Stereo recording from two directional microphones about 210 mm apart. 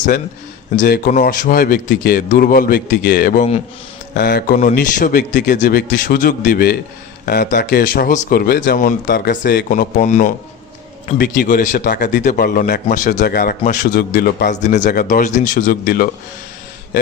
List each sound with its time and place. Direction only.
0.8 s a man's voice: 40° left (ahead or behind)